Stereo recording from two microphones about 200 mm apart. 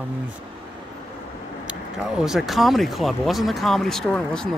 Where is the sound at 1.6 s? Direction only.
5° right (ahead or behind).